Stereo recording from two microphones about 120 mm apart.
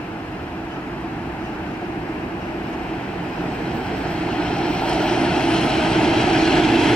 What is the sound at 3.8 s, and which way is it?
Vehicle, 10° left (ahead or behind).